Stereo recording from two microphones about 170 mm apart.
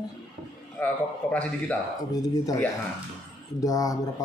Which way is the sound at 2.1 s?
20° left (ahead or behind).